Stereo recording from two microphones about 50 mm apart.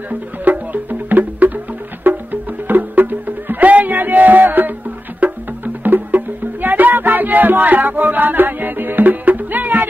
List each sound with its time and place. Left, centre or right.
0.1 s music: right